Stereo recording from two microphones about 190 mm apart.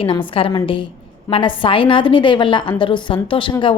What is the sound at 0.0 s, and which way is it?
A woman's voice, 25° left (ahead or behind).